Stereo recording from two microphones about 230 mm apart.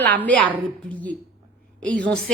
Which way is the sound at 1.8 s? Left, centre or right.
Centre.